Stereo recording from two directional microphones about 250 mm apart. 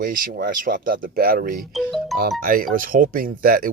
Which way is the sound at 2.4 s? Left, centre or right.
Right.